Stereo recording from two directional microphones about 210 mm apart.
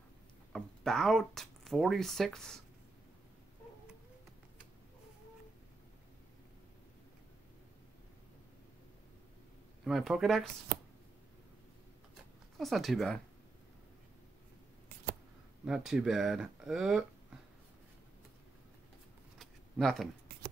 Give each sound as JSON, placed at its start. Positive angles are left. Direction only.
{"t": 0.5, "sound": "speech", "side_deg": 5}
{"t": 9.8, "sound": "speech", "side_deg": 0}
{"t": 12.5, "sound": "speech", "side_deg": 0}
{"t": 15.6, "sound": "speech", "side_deg": -5}
{"t": 19.3, "sound": "a sound", "side_deg": 0}